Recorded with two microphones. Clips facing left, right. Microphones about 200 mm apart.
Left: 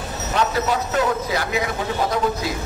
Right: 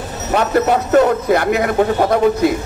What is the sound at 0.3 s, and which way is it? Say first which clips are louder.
A man's voice: right 7 dB; 60° right (ahead or behind).